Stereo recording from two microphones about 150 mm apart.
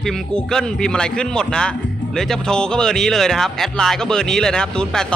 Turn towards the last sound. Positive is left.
turn(degrees=5)  # may be behind; listen again after turning